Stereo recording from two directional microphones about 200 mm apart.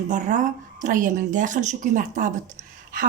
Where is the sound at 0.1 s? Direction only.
40° right (ahead or behind).